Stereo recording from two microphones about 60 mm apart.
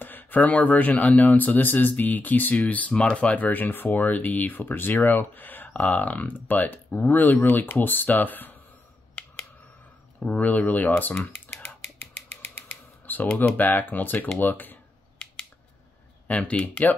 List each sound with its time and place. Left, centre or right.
0.0 s speech: left
10.2 s speech: left
12.5 s typewriter: left
13.4 s speech: left
16.3 s speech: left